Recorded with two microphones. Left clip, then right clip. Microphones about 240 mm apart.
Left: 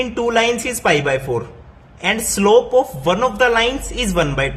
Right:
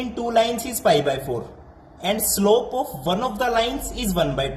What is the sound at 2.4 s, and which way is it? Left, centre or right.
A man's voice, left.